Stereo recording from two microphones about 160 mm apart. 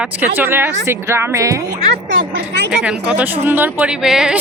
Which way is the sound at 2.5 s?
90° right.